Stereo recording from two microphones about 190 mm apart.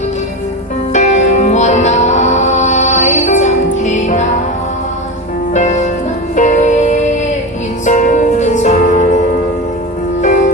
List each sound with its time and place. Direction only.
0.9 s music: 40° left (ahead or behind)
5.5 s music: 40° left (ahead or behind)
10.2 s music: 40° left (ahead or behind)